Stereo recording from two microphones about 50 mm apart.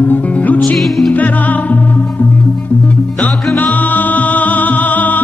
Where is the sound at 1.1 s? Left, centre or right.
Left.